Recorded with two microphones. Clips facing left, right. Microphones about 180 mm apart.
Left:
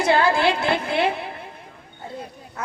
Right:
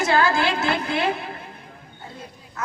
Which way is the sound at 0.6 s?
30° left (ahead or behind).